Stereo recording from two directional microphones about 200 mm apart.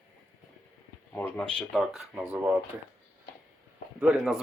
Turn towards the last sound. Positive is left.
turn(degrees=-5)  # may be behind; listen again after turning